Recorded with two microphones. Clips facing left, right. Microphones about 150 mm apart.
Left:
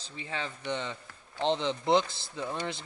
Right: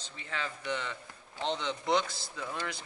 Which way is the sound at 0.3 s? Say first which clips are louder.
Left 1 dB; 25° left (ahead or behind).